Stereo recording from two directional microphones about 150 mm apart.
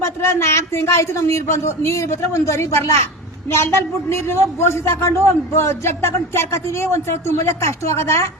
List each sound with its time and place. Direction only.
0.0 s a man's voice: 20° left (ahead or behind)